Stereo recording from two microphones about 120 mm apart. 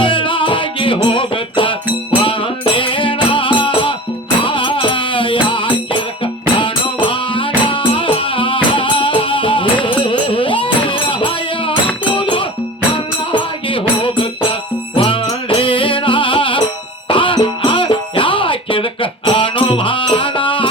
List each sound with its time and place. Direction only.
0.0 s music: 45° left (ahead or behind)